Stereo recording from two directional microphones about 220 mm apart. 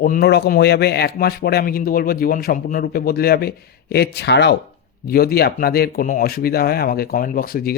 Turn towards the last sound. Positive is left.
turn(degrees=40)  # may be behind; listen again after turning